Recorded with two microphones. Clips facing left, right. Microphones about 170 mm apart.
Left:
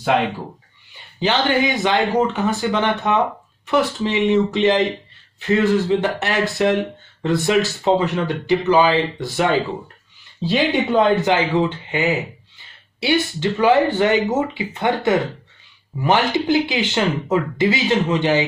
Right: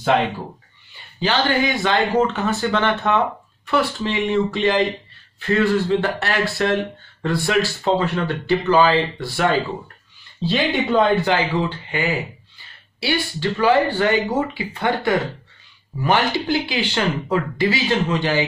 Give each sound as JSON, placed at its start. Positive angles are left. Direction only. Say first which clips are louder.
{"t": 1.2, "sound": "speech", "louder": "left 1 dB", "side_deg": 20}